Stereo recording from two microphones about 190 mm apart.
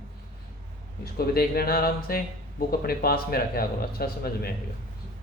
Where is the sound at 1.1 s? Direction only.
55° left (ahead or behind).